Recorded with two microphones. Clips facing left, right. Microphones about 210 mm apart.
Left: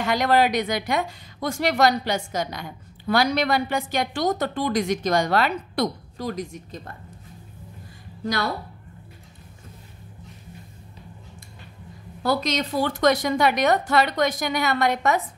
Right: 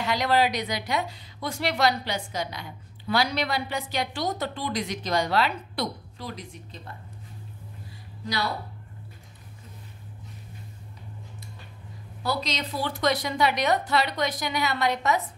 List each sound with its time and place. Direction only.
0.0 s a woman's voice: 50° left (ahead or behind)
12.2 s a woman's voice: 50° left (ahead or behind)